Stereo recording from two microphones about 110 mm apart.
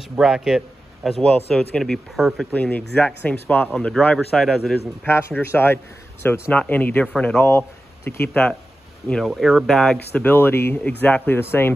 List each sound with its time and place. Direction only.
0.2 s a man's voice: 5° right (ahead or behind)
2.5 s speech: 15° left (ahead or behind)
5.0 s speech: 20° left (ahead or behind)
8.3 s speech: 10° left (ahead or behind)
9.1 s speech: centre (ahead or behind)
10.2 s speech: 20° left (ahead or behind)